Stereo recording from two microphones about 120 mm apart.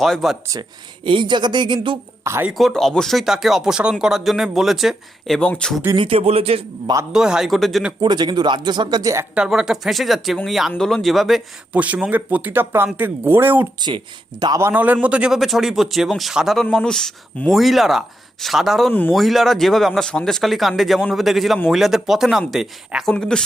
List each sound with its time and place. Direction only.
0.0 s speech: centre (ahead or behind)
1.0 s speech: 40° right (ahead or behind)
2.2 s speech: 20° right (ahead or behind)
2.5 s speech: centre (ahead or behind)
6.0 s speech: 50° right (ahead or behind)
7.1 s speech: 5° right (ahead or behind)
8.0 s speech: 40° right (ahead or behind)
9.3 s speech: 5° right (ahead or behind)
13.8 s speech: 35° right (ahead or behind)
14.6 s speech: 15° right (ahead or behind); by 23.4 s 5° left (ahead or behind)